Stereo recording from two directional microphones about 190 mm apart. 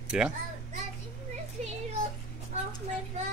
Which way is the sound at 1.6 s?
40° right (ahead or behind).